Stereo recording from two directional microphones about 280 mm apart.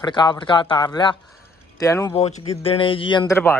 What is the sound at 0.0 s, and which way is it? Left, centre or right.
Speech, centre.